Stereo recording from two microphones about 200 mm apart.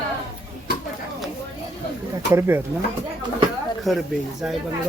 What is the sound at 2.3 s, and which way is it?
Speech, 15° right (ahead or behind).